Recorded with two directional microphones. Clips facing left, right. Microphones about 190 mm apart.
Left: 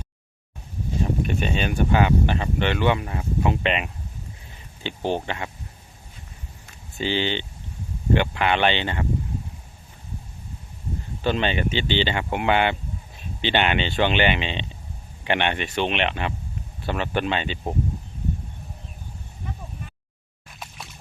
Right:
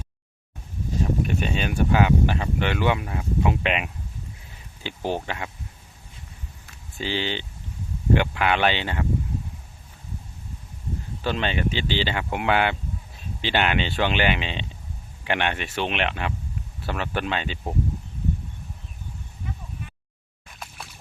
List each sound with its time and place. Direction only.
1.3 s speech: 5° right (ahead or behind)
7.0 s speech: centre (ahead or behind)
11.2 s speech: centre (ahead or behind)